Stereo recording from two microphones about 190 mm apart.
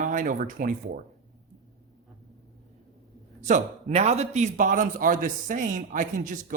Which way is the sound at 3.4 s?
40° right (ahead or behind).